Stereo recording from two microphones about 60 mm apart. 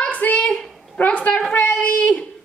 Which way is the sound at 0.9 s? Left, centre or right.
Left.